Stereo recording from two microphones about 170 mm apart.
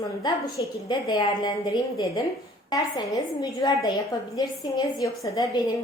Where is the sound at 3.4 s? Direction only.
20° left (ahead or behind).